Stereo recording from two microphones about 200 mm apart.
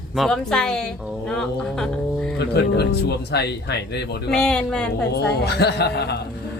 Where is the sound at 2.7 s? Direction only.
55° left (ahead or behind).